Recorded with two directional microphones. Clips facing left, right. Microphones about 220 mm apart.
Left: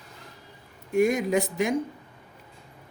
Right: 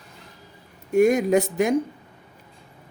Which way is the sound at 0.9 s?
45° right (ahead or behind).